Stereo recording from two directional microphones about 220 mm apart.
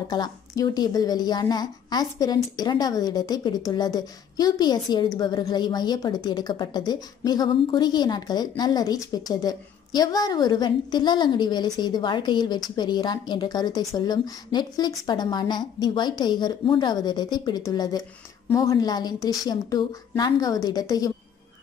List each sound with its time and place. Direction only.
0.1 s a woman's voice: 20° left (ahead or behind)